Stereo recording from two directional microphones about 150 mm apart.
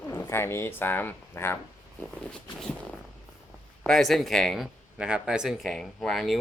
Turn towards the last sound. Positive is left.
turn(degrees=0)  # may be behind; listen again after turning